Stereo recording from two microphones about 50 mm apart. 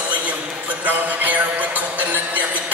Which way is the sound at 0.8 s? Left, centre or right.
Right.